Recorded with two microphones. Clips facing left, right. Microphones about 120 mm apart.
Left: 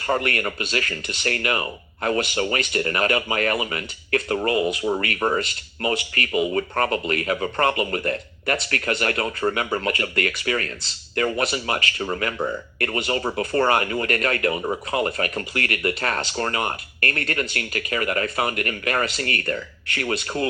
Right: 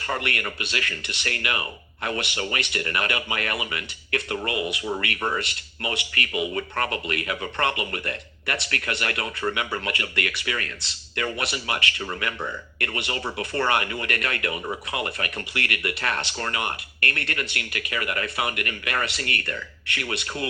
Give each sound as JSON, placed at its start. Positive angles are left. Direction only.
{"t": 0.1, "sound": "speech", "side_deg": 40}